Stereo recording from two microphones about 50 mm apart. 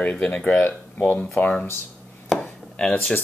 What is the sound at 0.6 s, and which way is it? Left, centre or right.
Speech, left.